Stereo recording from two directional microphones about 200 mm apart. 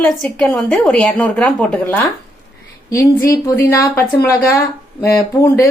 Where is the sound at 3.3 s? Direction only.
10° left (ahead or behind).